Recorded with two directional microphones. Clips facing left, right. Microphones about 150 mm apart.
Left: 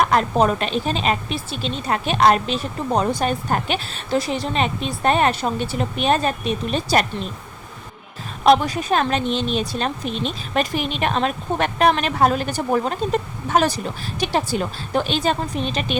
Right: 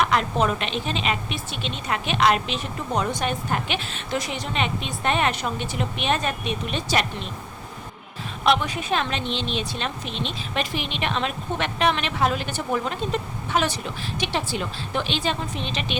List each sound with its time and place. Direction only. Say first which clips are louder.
0.0 s a woman's voice: left 4 dB; 40° left (ahead or behind)
8.4 s speech: left 6 dB; 40° left (ahead or behind)